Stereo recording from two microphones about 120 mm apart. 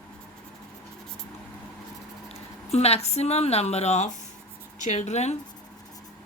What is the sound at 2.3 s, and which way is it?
Speech, 60° left (ahead or behind).